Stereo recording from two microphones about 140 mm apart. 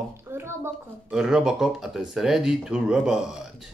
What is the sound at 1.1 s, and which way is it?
Speech, 5° right (ahead or behind).